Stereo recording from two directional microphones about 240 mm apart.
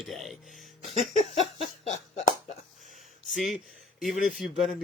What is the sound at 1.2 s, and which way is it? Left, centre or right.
Laughter, left.